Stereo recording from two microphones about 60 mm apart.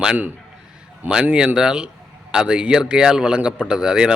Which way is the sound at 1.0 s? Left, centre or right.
Centre.